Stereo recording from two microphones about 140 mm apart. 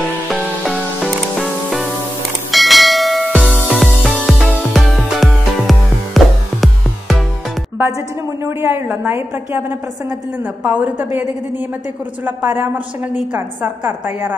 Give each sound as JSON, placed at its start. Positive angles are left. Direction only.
{"t": 0.3, "sound": "music", "side_deg": 0}
{"t": 2.5, "sound": "bell", "side_deg": 0}
{"t": 3.6, "sound": "music", "side_deg": 5}
{"t": 8.5, "sound": "a woman's voice", "side_deg": -15}
{"t": 10.6, "sound": "a woman's voice", "side_deg": -10}
{"t": 12.3, "sound": "a woman's voice", "side_deg": -10}